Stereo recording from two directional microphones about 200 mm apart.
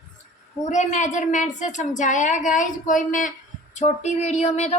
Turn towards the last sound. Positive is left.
turn(degrees=35)  # may be behind; listen again after turning